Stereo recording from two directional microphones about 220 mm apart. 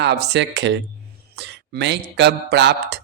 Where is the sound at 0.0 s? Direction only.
50° right (ahead or behind).